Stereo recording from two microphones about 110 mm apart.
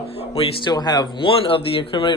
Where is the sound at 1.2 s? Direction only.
55° left (ahead or behind).